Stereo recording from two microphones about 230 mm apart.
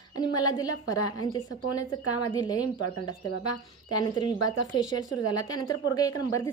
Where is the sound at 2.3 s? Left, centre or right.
Centre.